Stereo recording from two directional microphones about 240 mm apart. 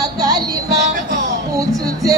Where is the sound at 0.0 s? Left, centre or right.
Centre.